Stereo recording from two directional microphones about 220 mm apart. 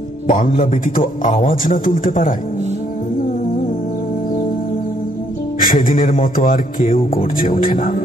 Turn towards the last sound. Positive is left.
turn(degrees=40)  # may be behind; listen again after turning